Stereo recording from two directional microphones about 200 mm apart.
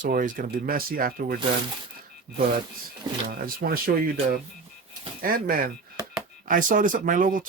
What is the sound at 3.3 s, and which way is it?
Speech, 45° right (ahead or behind).